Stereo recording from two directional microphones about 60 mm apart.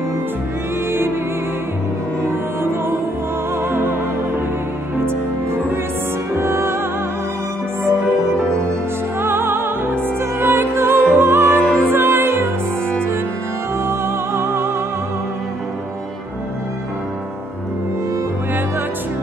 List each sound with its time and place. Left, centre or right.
6.3 s music: right
9.2 s music: right
11.6 s music: centre
11.9 s music: right
13.8 s music: right